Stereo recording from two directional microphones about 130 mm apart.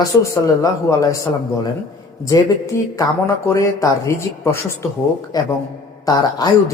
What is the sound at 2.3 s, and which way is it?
Speech, 25° left (ahead or behind).